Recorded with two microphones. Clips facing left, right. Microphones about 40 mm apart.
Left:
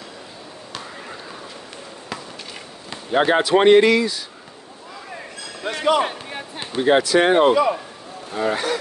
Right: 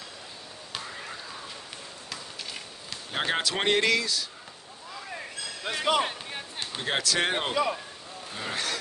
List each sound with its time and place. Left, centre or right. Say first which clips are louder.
2.9 s speech: left 11 dB; centre
5.7 s speech: left 7 dB; centre